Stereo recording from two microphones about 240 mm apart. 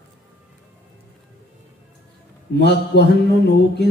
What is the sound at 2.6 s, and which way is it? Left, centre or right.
Speech, left.